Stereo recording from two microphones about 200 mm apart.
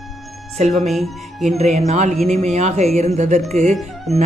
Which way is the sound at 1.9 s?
35° right (ahead or behind).